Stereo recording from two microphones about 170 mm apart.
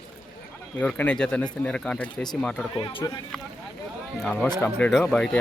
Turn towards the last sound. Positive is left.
turn(degrees=5)  # may be behind; listen again after turning